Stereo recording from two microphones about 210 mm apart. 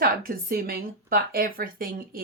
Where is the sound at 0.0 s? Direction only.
45° right (ahead or behind).